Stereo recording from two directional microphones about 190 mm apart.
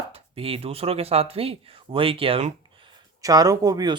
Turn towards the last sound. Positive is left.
turn(degrees=-20)  # may be behind; listen again after turning